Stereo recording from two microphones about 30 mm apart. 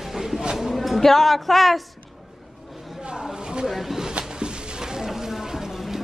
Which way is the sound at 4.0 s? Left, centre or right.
Right.